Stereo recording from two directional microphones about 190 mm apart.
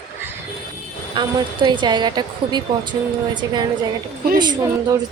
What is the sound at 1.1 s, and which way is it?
Speech, 25° right (ahead or behind).